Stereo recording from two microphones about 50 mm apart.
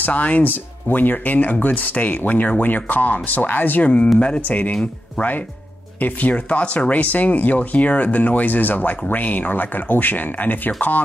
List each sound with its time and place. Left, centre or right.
0.0 s speech: left
5.9 s speech: left